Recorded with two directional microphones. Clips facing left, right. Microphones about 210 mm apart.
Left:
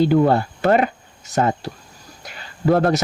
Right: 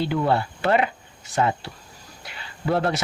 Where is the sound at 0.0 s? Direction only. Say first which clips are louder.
Left 7 dB; 45° left (ahead or behind).